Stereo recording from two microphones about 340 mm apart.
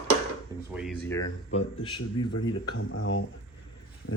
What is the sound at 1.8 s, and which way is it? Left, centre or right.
Speech, left.